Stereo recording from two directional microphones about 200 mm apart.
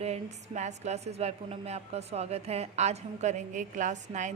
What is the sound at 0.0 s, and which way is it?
Speech, 35° right (ahead or behind).